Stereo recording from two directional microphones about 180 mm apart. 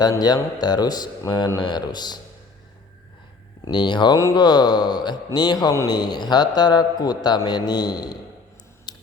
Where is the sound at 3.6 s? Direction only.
25° left (ahead or behind).